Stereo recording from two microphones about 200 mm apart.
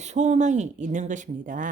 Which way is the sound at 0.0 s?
35° right (ahead or behind).